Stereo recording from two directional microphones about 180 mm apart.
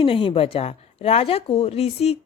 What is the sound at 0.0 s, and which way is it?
Speech, 30° left (ahead or behind).